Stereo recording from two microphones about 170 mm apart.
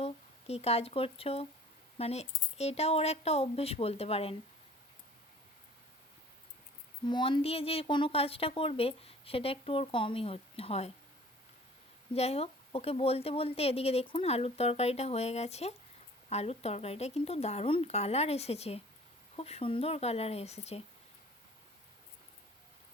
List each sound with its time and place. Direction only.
0.0 s speech: 35° left (ahead or behind)
7.0 s speech: 30° left (ahead or behind)
12.1 s speech: 35° left (ahead or behind)